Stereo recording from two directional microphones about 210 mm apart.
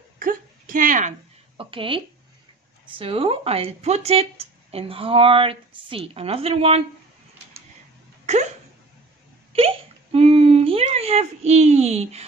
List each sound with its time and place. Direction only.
0.2 s a sound: 40° right (ahead or behind)
1.6 s speech: 25° right (ahead or behind)
8.3 s dog: 30° right (ahead or behind)
9.5 s hiccup: 25° right (ahead or behind)